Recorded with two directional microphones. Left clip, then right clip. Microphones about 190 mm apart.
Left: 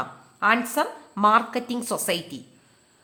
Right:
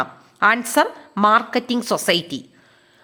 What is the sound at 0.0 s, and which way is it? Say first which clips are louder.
A woman's voice: right 6 dB; 35° right (ahead or behind).